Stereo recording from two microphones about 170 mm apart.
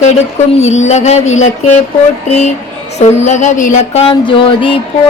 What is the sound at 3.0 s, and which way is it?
Mantra, 45° left (ahead or behind).